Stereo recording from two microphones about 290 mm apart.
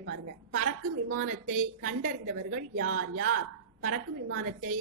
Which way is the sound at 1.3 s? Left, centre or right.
Right.